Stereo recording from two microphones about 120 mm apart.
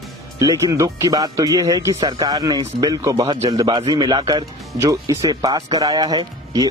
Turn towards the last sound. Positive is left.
turn(degrees=-30)  # may be behind; listen again after turning